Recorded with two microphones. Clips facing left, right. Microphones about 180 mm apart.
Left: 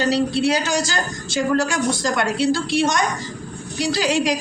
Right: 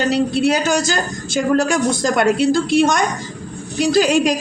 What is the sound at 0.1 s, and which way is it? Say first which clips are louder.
A woman's voice: right 3 dB; 50° right (ahead or behind).